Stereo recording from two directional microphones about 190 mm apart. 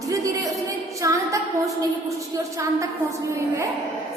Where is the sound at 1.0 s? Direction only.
15° right (ahead or behind).